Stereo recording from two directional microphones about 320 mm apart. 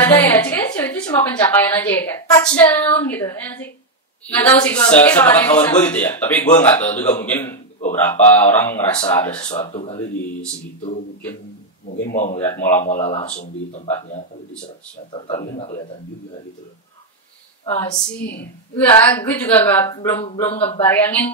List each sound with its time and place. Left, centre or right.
0.0 s a woman's voice: centre
9.5 s speech: centre
12.0 s speech: left
12.4 s a man's voice: centre
12.8 s speech: left
15.1 s speech: left
18.2 s a woman's voice: left
18.8 s a woman's voice: centre
20.5 s a man's voice: centre
20.8 s a woman's voice: centre